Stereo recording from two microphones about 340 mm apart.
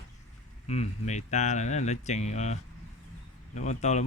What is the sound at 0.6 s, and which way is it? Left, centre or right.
Speech, centre.